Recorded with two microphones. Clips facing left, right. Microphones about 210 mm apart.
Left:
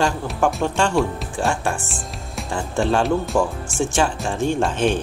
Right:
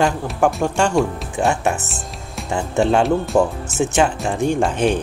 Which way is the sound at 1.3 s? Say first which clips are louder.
Right 6 dB; 20° right (ahead or behind).